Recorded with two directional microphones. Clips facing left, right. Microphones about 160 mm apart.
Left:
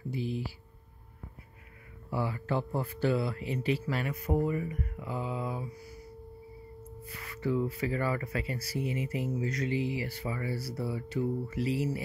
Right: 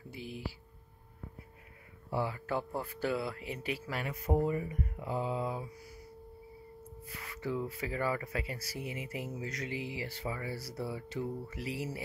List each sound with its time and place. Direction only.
0.1 s speech: 10° right (ahead or behind)
2.0 s a sound: 20° right (ahead or behind)
2.3 s speech: 10° right (ahead or behind)
4.5 s speech: 25° right (ahead or behind)
7.2 s speech: 15° right (ahead or behind)
10.7 s speech: 5° left (ahead or behind)
11.5 s speech: 15° right (ahead or behind)